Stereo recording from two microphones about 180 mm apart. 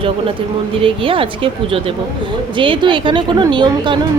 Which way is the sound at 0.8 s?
30° right (ahead or behind).